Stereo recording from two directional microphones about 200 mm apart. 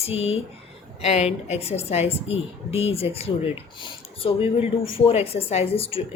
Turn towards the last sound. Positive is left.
turn(degrees=30)  # may be behind; listen again after turning